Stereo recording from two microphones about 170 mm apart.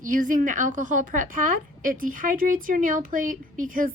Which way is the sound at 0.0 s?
50° right (ahead or behind).